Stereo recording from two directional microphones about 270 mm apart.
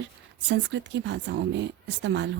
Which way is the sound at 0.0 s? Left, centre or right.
Right.